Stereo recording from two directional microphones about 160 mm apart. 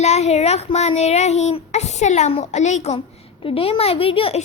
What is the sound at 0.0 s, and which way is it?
Speech, 45° left (ahead or behind).